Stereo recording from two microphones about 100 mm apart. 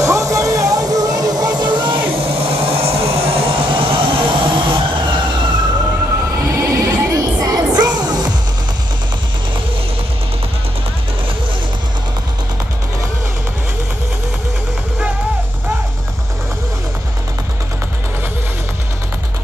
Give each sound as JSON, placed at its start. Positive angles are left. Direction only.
{"t": 0.0, "sound": "music", "side_deg": -35}
{"t": 6.4, "sound": "music", "side_deg": -30}